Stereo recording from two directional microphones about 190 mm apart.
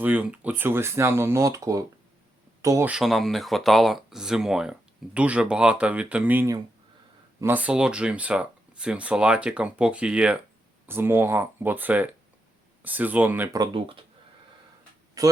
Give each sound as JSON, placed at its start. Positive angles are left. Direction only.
{"t": 0.0, "sound": "speech", "side_deg": -10}
{"t": 13.6, "sound": "speech", "side_deg": -30}
{"t": 15.2, "sound": "speech", "side_deg": -20}